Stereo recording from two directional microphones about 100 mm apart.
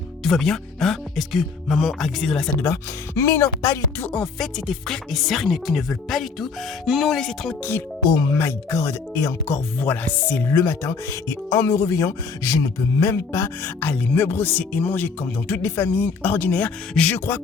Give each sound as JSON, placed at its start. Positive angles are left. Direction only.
{"t": 0.3, "sound": "speech", "side_deg": 5}
{"t": 3.2, "sound": "speech", "side_deg": 30}
{"t": 4.0, "sound": "speech", "side_deg": 10}
{"t": 8.1, "sound": "speech", "side_deg": 35}
{"t": 8.4, "sound": "speech", "side_deg": 25}
{"t": 9.8, "sound": "speech", "side_deg": 20}
{"t": 13.9, "sound": "speech", "side_deg": 20}
{"t": 17.2, "sound": "speech", "side_deg": 20}